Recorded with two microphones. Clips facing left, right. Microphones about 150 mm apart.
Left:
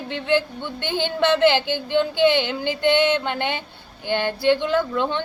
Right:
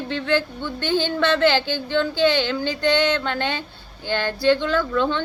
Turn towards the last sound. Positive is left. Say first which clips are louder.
# even
turn(degrees=20)  # may be behind; listen again after turning